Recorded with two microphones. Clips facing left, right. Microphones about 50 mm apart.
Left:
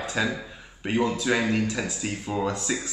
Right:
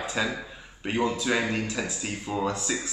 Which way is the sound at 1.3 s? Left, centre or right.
Centre.